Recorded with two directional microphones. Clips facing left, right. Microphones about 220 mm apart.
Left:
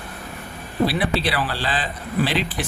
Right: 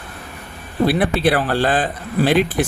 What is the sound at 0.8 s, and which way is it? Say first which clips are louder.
Speech: right 7 dB; 50° right (ahead or behind).